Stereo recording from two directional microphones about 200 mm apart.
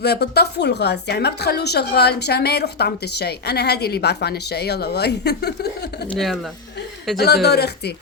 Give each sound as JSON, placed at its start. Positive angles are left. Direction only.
{"t": 0.0, "sound": "speech", "side_deg": 55}
{"t": 6.1, "sound": "speech", "side_deg": 0}
{"t": 7.4, "sound": "speech", "side_deg": 55}